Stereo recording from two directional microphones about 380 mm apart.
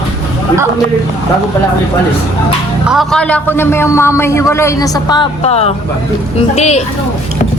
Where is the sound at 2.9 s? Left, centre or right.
Centre.